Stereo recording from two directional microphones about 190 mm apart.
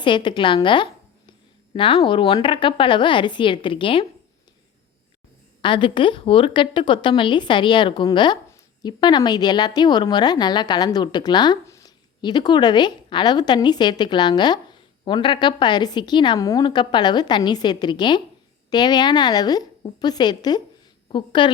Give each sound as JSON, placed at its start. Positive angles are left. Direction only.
{"t": 0.0, "sound": "a woman's voice", "side_deg": 25}
{"t": 5.6, "sound": "a woman's voice", "side_deg": 25}